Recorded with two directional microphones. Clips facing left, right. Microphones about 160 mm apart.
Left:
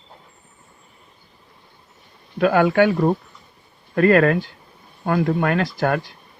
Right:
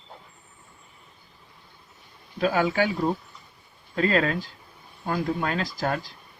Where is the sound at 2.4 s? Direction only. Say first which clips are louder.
Left 7 dB; 65° left (ahead or behind).